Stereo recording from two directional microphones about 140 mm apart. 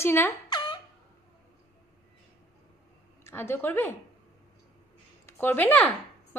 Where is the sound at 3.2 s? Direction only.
15° left (ahead or behind).